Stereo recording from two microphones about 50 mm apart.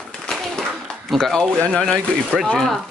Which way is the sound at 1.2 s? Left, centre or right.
Centre.